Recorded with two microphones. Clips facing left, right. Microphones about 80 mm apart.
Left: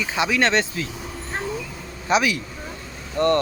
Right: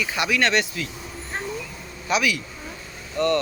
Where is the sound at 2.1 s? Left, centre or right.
Left.